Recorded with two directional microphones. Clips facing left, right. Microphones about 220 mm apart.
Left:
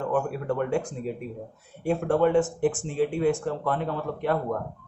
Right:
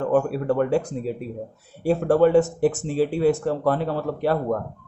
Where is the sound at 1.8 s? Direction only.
35° right (ahead or behind).